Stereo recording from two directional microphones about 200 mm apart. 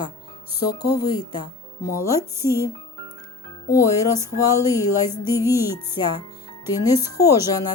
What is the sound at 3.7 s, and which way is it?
Speech, 15° left (ahead or behind).